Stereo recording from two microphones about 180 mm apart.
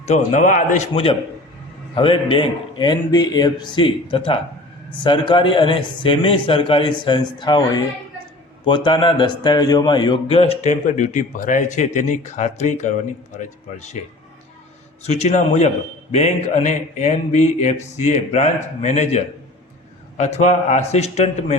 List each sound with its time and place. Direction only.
0.0 s a man's voice: 40° left (ahead or behind)
15.0 s speech: 35° left (ahead or behind)